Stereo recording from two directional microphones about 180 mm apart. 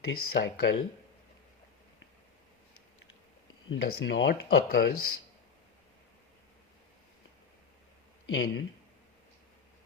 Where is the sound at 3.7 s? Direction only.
70° left (ahead or behind).